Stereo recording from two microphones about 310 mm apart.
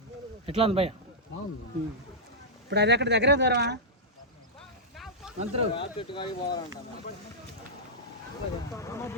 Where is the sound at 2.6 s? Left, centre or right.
Right.